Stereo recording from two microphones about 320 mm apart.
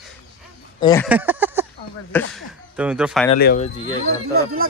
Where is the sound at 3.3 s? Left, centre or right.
Left.